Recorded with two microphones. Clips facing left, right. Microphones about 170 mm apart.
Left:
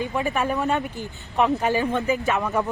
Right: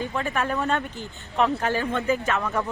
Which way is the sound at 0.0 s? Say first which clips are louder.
Left 2 dB; 15° left (ahead or behind).